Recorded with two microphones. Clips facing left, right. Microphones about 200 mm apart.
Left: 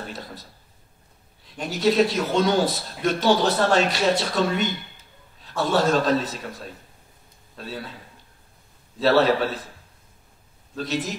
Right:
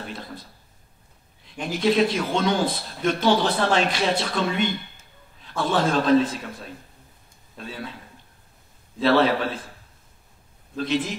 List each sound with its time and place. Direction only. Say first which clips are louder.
1.6 s speech: left 1 dB; 40° left (ahead or behind)
9.0 s speech: even; 45° left (ahead or behind)
10.8 s speech: right 2 dB; 40° left (ahead or behind)